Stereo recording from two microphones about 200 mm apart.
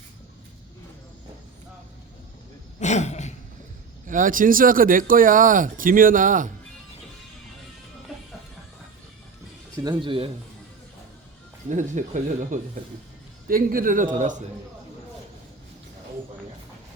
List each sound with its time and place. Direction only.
2.8 s a sound: 35° left (ahead or behind)
4.0 s speech: 40° right (ahead or behind)
9.7 s speech: 20° right (ahead or behind)
11.7 s speech: 40° right (ahead or behind)